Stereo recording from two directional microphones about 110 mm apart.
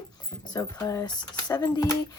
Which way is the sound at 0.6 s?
25° left (ahead or behind).